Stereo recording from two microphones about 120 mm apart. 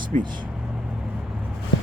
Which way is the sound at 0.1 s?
90° right.